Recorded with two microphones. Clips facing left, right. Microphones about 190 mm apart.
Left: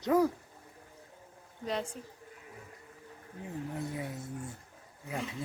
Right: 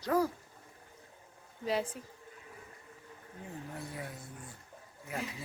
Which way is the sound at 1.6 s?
5° right (ahead or behind).